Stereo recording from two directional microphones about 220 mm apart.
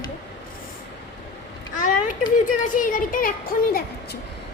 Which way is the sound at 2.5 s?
35° left (ahead or behind).